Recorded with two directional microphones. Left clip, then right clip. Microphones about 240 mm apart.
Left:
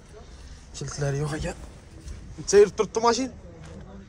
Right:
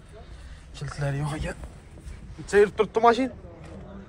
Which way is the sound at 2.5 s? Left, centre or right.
Left.